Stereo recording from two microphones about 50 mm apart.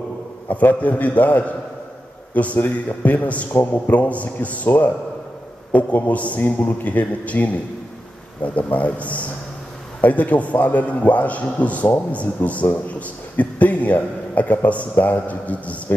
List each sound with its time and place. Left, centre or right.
0.5 s a man's voice: left
5.7 s a man's voice: left